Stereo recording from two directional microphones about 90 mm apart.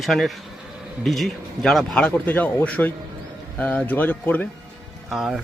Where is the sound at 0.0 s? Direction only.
Centre (ahead or behind).